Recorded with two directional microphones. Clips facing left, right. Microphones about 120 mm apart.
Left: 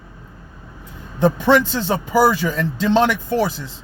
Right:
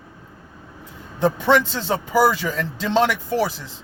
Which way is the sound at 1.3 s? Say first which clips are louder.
Left 3 dB; 5° left (ahead or behind).